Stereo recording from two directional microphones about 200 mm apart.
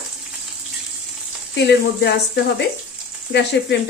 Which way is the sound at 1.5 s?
55° left (ahead or behind).